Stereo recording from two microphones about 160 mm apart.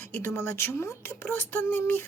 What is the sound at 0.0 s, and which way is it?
Speech, 15° left (ahead or behind).